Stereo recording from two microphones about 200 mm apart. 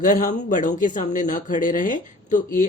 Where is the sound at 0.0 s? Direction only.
40° left (ahead or behind).